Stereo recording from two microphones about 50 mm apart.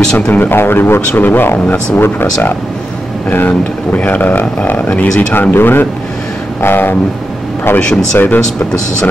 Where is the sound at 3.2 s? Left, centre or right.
Left.